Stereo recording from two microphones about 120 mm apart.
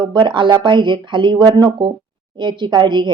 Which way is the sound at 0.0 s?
40° right (ahead or behind).